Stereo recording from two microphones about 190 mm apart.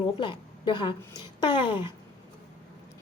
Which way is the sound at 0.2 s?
25° left (ahead or behind).